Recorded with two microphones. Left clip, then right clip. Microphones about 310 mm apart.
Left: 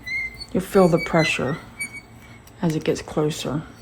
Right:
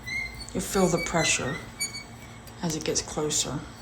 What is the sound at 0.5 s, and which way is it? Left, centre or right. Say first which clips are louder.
Speech: left 8 dB; left.